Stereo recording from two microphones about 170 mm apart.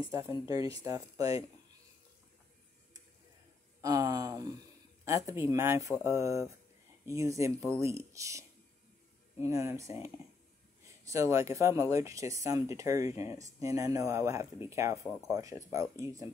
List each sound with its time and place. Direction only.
0.1 s speech: 20° right (ahead or behind)
3.8 s speech: 20° right (ahead or behind)
11.1 s speech: 20° right (ahead or behind)